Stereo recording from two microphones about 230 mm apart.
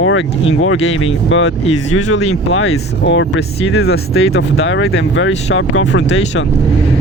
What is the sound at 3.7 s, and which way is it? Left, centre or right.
Speech, left.